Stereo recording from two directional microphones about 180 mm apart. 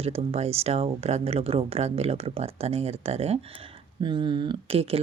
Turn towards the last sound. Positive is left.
turn(degrees=-35)  # may be behind; listen again after turning